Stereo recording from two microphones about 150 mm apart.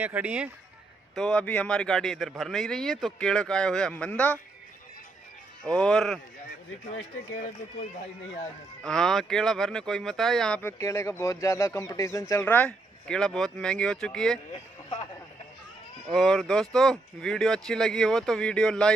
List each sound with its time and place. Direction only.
0.0 s speech: 10° right (ahead or behind)
1.1 s a man's voice: 5° left (ahead or behind)
5.6 s a man's voice: 5° left (ahead or behind)
8.8 s a man's voice: 5° left (ahead or behind)
10.6 s speech: 20° left (ahead or behind)
16.1 s a man's voice: centre (ahead or behind)